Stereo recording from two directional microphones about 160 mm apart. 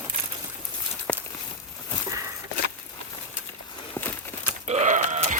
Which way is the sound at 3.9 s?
15° left (ahead or behind).